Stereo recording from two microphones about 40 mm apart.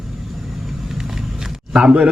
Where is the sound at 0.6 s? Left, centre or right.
Centre.